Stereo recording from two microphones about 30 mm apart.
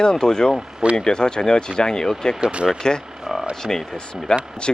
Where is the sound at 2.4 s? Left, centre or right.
Right.